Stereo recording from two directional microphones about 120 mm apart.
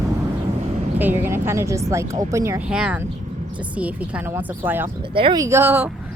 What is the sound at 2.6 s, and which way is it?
Speech, 5° right (ahead or behind).